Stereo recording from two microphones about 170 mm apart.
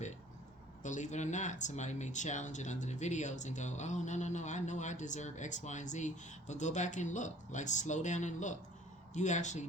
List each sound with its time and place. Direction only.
0.8 s speech: 45° left (ahead or behind)